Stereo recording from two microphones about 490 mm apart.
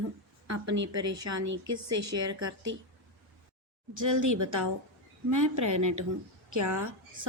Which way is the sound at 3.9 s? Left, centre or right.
Right.